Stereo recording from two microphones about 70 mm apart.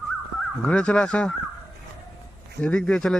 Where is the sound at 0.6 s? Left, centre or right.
Centre.